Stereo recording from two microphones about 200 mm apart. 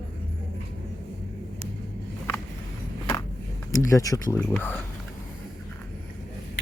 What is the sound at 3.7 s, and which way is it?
Speech, 15° left (ahead or behind).